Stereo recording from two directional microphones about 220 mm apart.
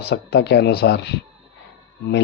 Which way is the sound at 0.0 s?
50° left (ahead or behind).